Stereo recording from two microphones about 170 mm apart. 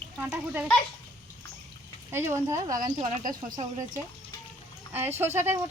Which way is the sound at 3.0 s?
50° right (ahead or behind).